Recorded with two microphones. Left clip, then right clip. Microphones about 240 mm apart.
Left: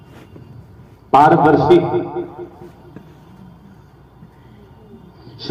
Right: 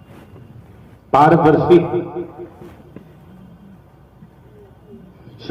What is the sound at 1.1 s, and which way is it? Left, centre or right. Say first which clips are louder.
Speech: left 1 dB; left.